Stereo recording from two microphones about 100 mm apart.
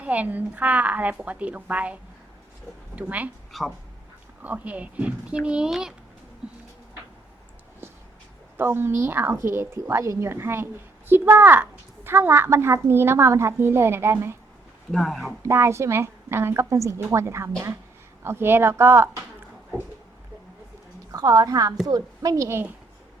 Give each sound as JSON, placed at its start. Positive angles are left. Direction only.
{"t": 0.0, "sound": "a woman's voice", "side_deg": -15}
{"t": 3.5, "sound": "speech", "side_deg": 0}
{"t": 4.4, "sound": "a woman's voice", "side_deg": -15}
{"t": 8.5, "sound": "a child's voice", "side_deg": -25}
{"t": 14.9, "sound": "speech", "side_deg": 5}
{"t": 15.4, "sound": "a child's voice", "side_deg": -25}
{"t": 21.1, "sound": "a woman's voice", "side_deg": -40}